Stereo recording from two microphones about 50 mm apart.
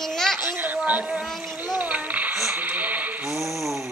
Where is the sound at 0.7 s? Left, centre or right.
Right.